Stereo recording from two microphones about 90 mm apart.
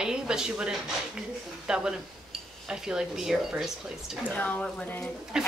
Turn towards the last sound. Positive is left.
turn(degrees=-10)  # may be behind; listen again after turning